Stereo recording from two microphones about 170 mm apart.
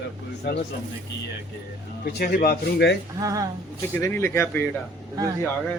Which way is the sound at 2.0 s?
60° left (ahead or behind).